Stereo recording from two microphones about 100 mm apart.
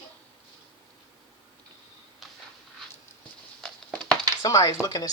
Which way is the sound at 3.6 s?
10° left (ahead or behind).